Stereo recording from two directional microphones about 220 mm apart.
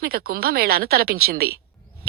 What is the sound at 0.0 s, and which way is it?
A woman's voice, 45° right (ahead or behind).